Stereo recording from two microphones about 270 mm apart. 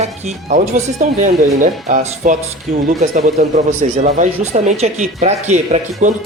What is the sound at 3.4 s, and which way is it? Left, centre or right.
Speech, right.